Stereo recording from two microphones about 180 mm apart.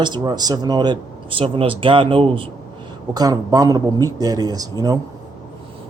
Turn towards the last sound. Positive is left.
turn(degrees=-20)  # may be behind; listen again after turning